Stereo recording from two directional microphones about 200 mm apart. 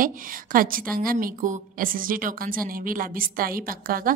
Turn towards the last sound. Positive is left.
turn(degrees=-45)  # may be behind; listen again after turning